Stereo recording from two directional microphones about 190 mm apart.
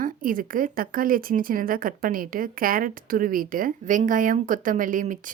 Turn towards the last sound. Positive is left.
turn(degrees=-45)  # may be behind; listen again after turning